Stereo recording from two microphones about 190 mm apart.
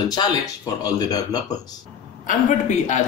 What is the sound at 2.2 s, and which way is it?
Speech, 40° left (ahead or behind).